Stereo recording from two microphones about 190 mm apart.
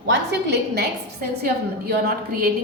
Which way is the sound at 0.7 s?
55° right (ahead or behind).